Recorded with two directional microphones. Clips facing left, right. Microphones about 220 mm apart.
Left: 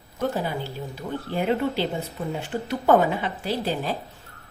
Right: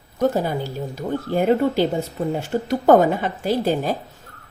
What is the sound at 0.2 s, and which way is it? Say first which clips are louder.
Speech: right 6 dB; 45° right (ahead or behind).